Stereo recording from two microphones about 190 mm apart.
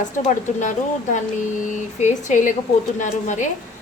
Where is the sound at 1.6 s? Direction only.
40° left (ahead or behind).